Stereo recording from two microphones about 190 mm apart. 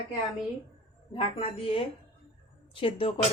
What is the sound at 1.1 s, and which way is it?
A woman's voice, 30° left (ahead or behind).